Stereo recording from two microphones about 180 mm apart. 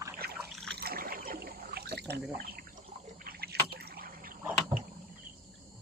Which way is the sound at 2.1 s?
55° right (ahead or behind).